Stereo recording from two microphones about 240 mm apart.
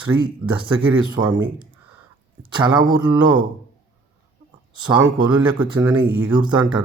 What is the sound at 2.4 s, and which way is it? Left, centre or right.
Speech, centre.